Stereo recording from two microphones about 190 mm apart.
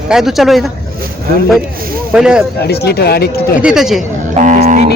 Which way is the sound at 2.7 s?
60° left (ahead or behind).